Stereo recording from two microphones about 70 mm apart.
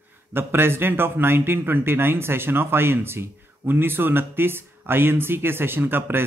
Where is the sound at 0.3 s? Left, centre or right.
Right.